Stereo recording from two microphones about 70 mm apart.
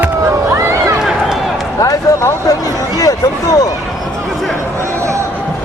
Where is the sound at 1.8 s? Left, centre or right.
Left.